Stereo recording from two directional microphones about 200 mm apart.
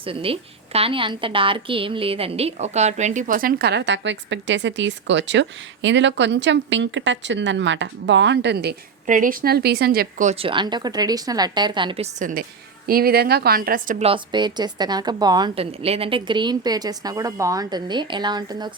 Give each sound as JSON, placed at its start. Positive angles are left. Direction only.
{"t": 0.0, "sound": "a woman's voice", "side_deg": -25}
{"t": 9.0, "sound": "a woman's voice", "side_deg": -40}
{"t": 12.2, "sound": "a woman's voice", "side_deg": -45}
{"t": 14.1, "sound": "a woman's voice", "side_deg": -20}